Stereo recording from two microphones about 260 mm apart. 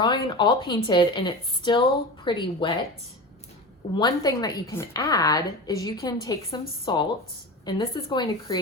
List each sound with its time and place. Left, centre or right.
0.0 s a woman's voice: centre
3.9 s a woman's voice: centre